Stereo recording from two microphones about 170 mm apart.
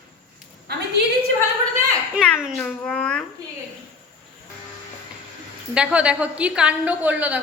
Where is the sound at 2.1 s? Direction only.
Centre (ahead or behind).